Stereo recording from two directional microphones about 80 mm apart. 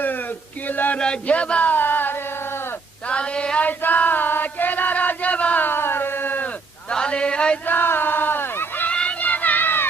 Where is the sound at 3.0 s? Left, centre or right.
Centre.